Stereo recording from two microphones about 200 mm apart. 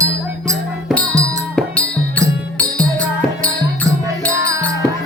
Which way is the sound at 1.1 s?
15° right (ahead or behind).